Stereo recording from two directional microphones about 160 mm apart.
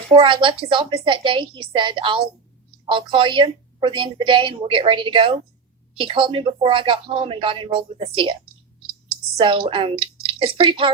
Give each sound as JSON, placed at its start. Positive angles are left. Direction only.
{"t": 0.1, "sound": "a woman's voice", "side_deg": -30}
{"t": 9.4, "sound": "a woman's voice", "side_deg": -30}